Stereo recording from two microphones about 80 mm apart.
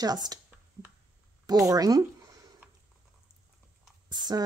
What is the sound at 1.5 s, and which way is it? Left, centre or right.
Speech, right.